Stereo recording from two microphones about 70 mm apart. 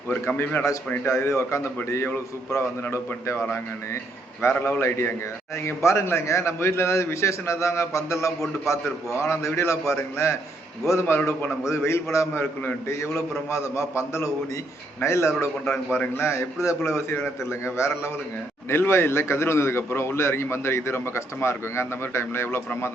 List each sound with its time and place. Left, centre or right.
0.1 s a man's voice: left
4.4 s a man's voice: left
11.0 s a man's voice: left